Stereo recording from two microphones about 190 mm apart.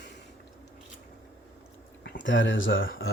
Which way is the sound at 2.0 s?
75° left (ahead or behind).